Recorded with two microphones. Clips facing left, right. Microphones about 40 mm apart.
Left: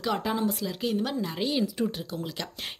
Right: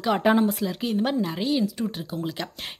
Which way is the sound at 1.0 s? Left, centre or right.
Right.